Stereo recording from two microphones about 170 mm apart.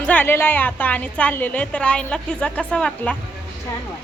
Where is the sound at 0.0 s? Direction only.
10° left (ahead or behind).